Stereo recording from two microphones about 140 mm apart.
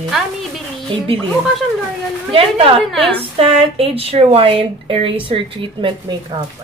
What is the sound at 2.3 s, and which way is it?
Speech, 40° right (ahead or behind).